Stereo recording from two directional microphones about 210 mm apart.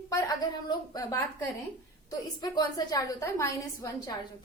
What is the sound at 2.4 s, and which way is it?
A woman's voice, 20° left (ahead or behind).